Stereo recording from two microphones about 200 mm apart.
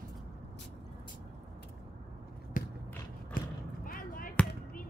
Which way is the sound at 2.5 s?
40° left (ahead or behind).